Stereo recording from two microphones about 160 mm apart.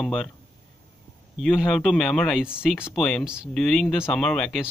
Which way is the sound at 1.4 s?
Centre (ahead or behind).